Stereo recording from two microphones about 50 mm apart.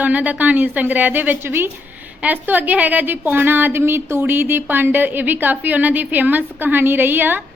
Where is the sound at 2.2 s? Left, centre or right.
Right.